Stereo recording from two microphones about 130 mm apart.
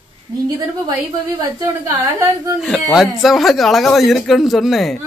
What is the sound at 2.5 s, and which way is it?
A man's voice, 5° right (ahead or behind).